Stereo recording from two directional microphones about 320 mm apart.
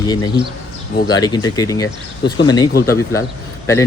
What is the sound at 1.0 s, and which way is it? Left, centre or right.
Speech, centre.